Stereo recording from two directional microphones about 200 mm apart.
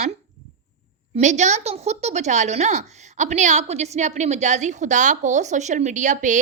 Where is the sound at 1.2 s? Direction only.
35° right (ahead or behind).